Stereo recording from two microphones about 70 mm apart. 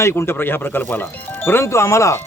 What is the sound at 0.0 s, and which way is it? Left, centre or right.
Speech, left.